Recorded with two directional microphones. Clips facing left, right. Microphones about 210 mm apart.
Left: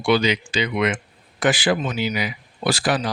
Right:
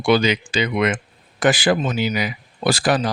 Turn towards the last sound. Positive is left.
turn(degrees=-45)  # may be behind; listen again after turning